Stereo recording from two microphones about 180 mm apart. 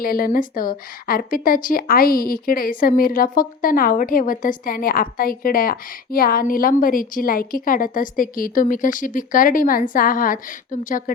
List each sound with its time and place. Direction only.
0.0 s a woman's voice: 55° left (ahead or behind)